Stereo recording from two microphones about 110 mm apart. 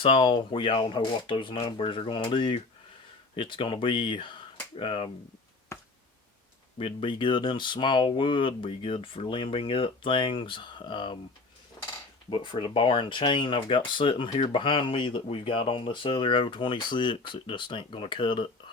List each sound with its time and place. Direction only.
0.0 s speech: 50° left (ahead or behind)
6.7 s speech: 55° left (ahead or behind)
12.3 s speech: 50° left (ahead or behind)